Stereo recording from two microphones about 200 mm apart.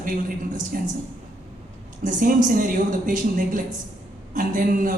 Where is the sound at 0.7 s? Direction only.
45° right (ahead or behind).